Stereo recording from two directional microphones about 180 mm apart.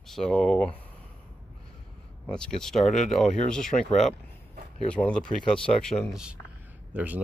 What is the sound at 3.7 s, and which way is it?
Speech, 25° left (ahead or behind).